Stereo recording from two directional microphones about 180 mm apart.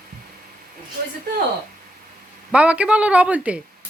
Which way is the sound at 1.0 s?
55° right (ahead or behind).